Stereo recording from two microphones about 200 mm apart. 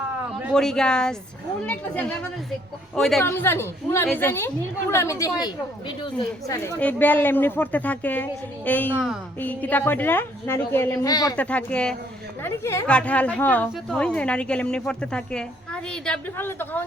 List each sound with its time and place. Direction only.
0.4 s a woman's voice: centre (ahead or behind)
3.2 s a woman's voice: 10° left (ahead or behind)
6.7 s a woman's voice: 10° left (ahead or behind)
8.9 s speech: 5° right (ahead or behind)
9.4 s a woman's voice: 10° left (ahead or behind)
11.3 s speech: 5° left (ahead or behind)